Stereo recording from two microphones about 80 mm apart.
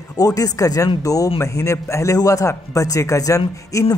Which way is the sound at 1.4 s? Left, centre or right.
Left.